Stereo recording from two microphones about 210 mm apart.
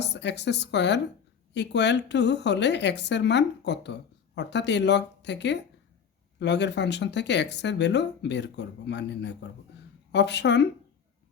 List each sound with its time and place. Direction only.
0.0 s speech: 55° left (ahead or behind)